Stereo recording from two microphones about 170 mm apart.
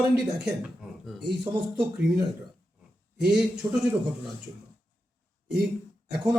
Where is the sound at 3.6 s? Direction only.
25° right (ahead or behind).